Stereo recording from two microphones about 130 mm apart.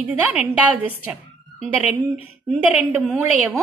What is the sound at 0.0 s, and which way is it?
A woman's voice, 10° right (ahead or behind).